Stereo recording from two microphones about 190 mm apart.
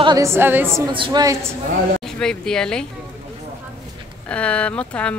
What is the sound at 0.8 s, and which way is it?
Speech, 25° right (ahead or behind).